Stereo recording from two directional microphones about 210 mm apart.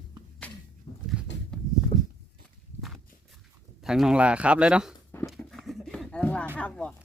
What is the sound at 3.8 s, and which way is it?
Speech, centre (ahead or behind).